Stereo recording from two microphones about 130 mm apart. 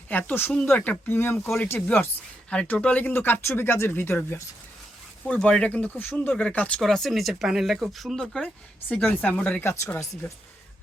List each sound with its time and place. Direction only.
0.1 s speech: 15° left (ahead or behind)
5.2 s speech: 10° left (ahead or behind)